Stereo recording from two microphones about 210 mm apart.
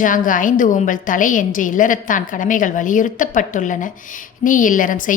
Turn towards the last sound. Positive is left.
turn(degrees=40)  # may be behind; listen again after turning